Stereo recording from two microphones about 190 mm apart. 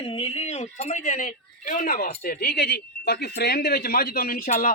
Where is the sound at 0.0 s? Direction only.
30° left (ahead or behind).